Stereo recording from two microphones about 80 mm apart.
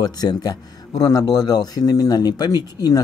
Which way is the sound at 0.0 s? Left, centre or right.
Left.